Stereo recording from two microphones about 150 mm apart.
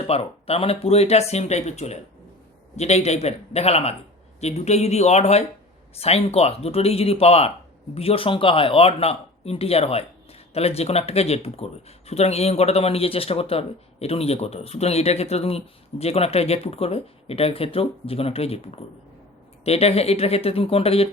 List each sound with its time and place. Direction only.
0.1 s speech: 40° left (ahead or behind)